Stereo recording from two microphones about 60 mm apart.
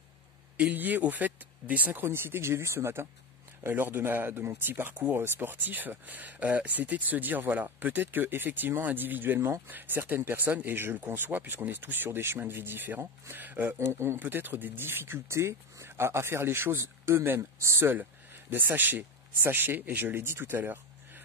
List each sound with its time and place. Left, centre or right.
0.6 s speech: right
2.0 s speech: right
13.7 s speech: right
18.5 s speech: right